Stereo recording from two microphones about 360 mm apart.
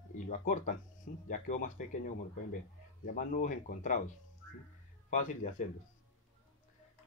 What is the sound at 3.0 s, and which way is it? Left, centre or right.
Speech, left.